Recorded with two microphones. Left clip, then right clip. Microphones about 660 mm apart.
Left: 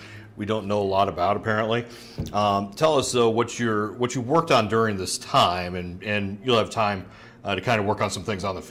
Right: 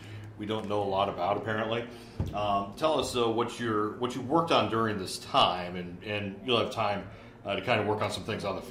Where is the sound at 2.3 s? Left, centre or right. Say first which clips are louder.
Left 7 dB; left.